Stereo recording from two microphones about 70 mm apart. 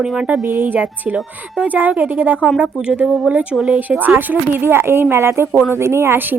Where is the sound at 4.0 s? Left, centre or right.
Right.